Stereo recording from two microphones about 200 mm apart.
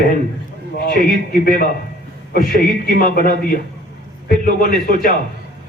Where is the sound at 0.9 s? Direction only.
45° left (ahead or behind).